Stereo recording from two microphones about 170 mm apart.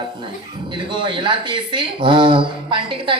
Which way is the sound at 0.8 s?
30° right (ahead or behind).